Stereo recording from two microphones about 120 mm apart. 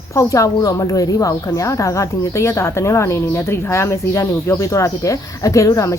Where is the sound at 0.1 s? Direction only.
25° left (ahead or behind).